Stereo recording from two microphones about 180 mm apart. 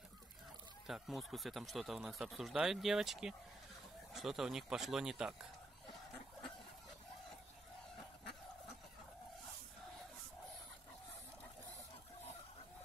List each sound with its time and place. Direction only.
0.8 s speech: centre (ahead or behind)